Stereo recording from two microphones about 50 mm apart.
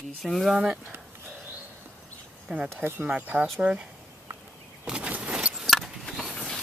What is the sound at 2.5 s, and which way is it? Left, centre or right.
Speech, centre.